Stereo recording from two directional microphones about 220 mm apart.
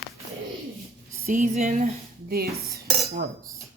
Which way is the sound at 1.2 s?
30° right (ahead or behind).